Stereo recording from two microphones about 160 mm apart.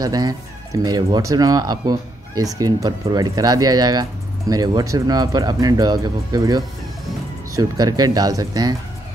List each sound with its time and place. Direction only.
0.0 s speech: 25° right (ahead or behind)